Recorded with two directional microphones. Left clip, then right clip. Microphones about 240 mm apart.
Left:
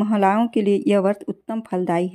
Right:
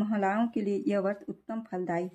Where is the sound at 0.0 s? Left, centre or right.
Left.